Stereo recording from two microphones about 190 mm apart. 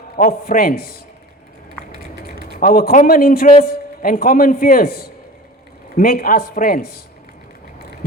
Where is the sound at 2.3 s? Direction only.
50° left (ahead or behind).